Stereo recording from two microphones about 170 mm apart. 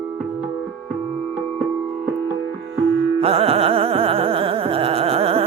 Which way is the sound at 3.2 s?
35° right (ahead or behind).